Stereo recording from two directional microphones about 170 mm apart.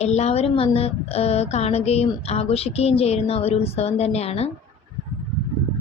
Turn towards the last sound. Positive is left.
turn(degrees=40)  # may be behind; listen again after turning